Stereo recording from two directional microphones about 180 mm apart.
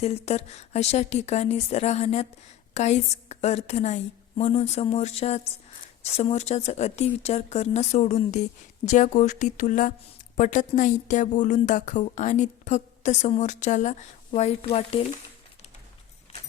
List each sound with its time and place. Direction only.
0.0 s a woman's voice: 35° left (ahead or behind)